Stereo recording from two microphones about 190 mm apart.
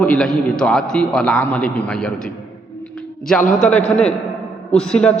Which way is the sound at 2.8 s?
5° left (ahead or behind).